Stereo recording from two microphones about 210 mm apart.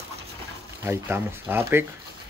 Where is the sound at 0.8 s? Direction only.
10° right (ahead or behind).